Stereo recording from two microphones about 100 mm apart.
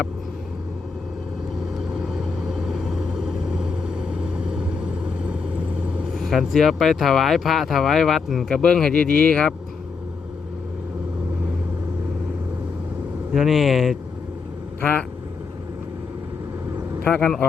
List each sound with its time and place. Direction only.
2.5 s vehicle: 5° right (ahead or behind)
6.1 s speech: centre (ahead or behind)
13.3 s speech: centre (ahead or behind)
14.8 s vehicle: 15° left (ahead or behind)
17.0 s speech: 10° left (ahead or behind)